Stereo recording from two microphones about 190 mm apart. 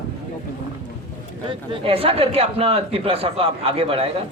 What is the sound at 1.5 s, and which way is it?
Speech, 30° right (ahead or behind).